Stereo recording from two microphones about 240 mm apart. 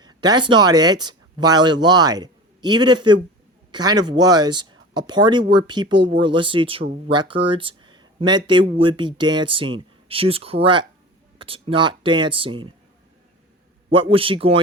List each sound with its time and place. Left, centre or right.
0.0 s speech: centre
13.9 s speech: right